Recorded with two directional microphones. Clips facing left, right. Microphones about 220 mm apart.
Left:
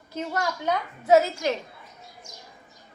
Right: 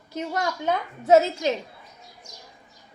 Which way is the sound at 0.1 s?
15° right (ahead or behind).